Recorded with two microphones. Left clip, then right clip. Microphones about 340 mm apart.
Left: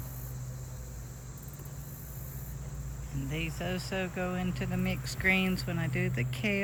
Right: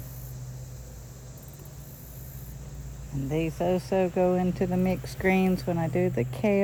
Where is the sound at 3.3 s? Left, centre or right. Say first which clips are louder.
Right 10 dB; right.